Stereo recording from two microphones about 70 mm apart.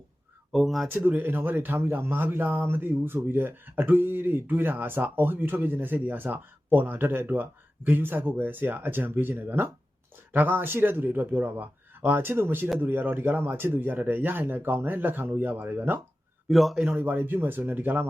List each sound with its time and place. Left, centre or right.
0.5 s a man's voice: centre
1.0 s a man's voice: right
16.5 s a man's voice: centre
16.8 s a man's voice: right